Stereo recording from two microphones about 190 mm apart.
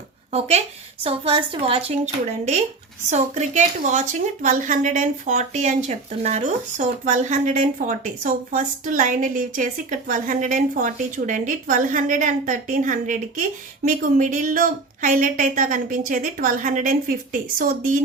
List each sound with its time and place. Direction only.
1.0 s a woman's voice: 30° right (ahead or behind)
3.1 s a woman's voice: 35° right (ahead or behind)